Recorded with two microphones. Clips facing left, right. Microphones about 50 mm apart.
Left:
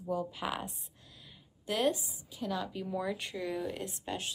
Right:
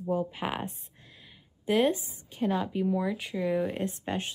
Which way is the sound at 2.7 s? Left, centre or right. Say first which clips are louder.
Right 8 dB; centre.